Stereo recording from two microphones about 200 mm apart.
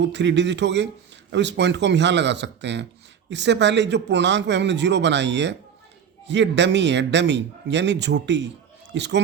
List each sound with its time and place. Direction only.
0.0 s a man's voice: 60° right (ahead or behind)